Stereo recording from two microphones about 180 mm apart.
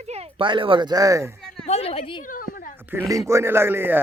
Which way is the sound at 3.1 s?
15° right (ahead or behind).